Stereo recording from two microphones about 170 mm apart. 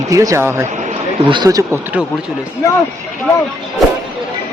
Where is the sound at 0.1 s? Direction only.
20° right (ahead or behind).